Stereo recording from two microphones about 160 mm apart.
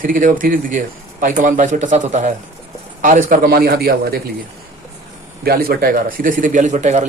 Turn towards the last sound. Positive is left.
turn(degrees=-45)  # may be behind; listen again after turning